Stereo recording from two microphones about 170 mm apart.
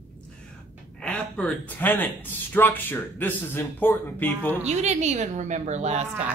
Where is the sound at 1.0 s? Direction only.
5° left (ahead or behind).